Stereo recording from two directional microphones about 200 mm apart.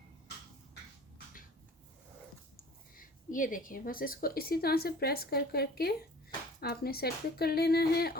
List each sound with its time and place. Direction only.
2.9 s a woman's voice: 45° left (ahead or behind)